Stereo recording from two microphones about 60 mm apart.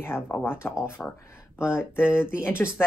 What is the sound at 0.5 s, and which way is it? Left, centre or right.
Speech, left.